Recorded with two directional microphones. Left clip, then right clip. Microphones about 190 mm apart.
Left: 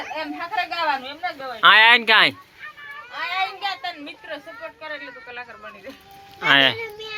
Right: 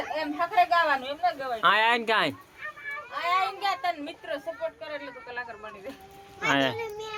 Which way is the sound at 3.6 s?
65° right (ahead or behind).